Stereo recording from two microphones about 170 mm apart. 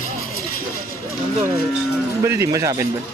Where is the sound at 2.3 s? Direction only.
20° right (ahead or behind).